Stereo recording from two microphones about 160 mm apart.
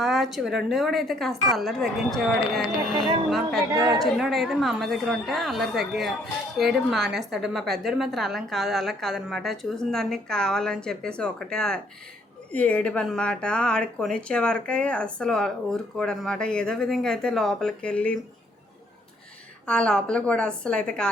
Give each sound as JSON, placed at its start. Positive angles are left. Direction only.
{"t": 0.0, "sound": "speech", "side_deg": 0}
{"t": 3.7, "sound": "a woman's voice", "side_deg": -20}
{"t": 4.0, "sound": "speech", "side_deg": 0}
{"t": 19.6, "sound": "speech", "side_deg": 5}